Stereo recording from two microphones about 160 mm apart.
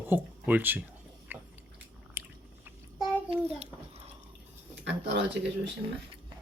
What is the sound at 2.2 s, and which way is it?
Biting, 15° right (ahead or behind).